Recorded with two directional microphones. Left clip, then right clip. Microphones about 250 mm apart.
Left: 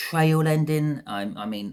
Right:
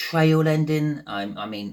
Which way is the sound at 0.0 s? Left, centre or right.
Left.